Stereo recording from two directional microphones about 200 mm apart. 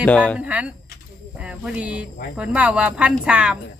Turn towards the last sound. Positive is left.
turn(degrees=-5)  # may be behind; listen again after turning